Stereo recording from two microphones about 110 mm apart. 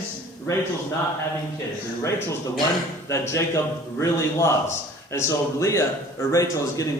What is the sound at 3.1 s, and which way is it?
A man's voice, 25° left (ahead or behind).